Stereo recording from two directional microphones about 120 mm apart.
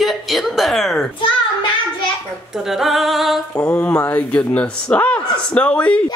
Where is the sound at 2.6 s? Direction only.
Centre (ahead or behind).